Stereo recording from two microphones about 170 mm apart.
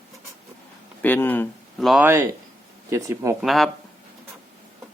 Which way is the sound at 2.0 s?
15° right (ahead or behind).